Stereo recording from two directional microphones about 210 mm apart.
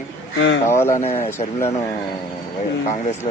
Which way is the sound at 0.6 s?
10° left (ahead or behind).